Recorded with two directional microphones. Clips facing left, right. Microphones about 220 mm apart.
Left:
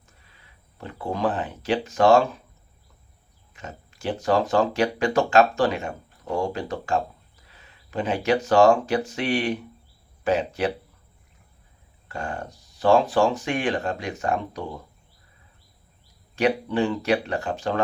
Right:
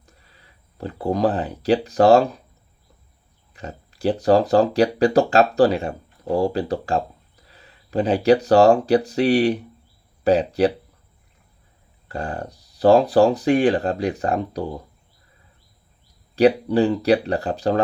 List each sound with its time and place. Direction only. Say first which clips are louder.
0.0 s speech: right 3 dB; 35° right (ahead or behind)
3.5 s speech: right 4 dB; 35° right (ahead or behind)
12.0 s speech: right 4 dB; 35° right (ahead or behind)
16.3 s speech: right 7 dB; 35° right (ahead or behind)